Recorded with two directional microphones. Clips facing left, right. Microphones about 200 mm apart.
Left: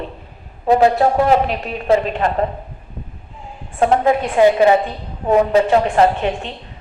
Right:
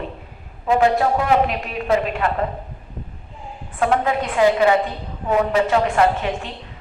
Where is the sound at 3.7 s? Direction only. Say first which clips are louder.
Left 4 dB; 30° left (ahead or behind).